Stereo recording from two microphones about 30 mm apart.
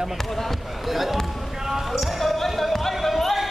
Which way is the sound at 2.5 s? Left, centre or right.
Centre.